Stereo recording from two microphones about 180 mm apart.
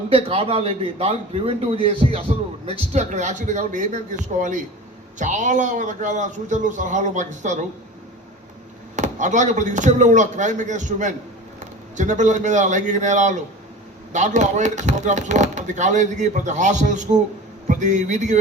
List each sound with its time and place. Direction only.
0.1 s a man's voice: 30° right (ahead or behind)
9.0 s a man's voice: 45° right (ahead or behind)